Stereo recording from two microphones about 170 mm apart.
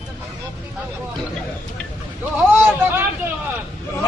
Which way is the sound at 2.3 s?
10° right (ahead or behind).